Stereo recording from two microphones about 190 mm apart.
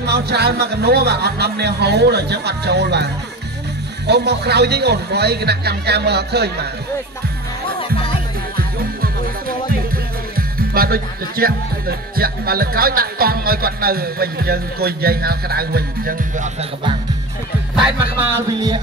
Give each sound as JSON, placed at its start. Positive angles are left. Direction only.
{"t": 0.0, "sound": "speech", "side_deg": -60}
{"t": 4.1, "sound": "speech", "side_deg": -60}
{"t": 10.7, "sound": "speech", "side_deg": -50}